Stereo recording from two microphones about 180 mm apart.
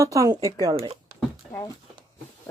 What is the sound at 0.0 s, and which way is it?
Speech, 20° right (ahead or behind).